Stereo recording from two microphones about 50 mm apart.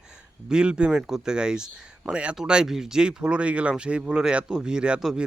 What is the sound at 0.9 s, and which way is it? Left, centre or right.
Speech, centre.